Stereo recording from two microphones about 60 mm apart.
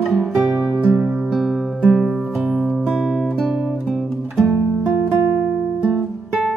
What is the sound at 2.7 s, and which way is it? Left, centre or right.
Guitar, centre.